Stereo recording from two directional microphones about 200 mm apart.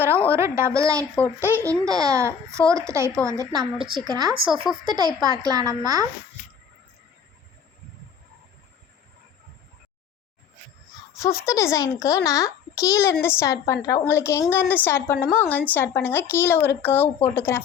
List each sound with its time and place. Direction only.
0.3 s a woman's voice: 15° right (ahead or behind)
1.1 s speech: 5° left (ahead or behind)
1.5 s a woman's voice: 10° right (ahead or behind)
11.2 s speech: 15° left (ahead or behind)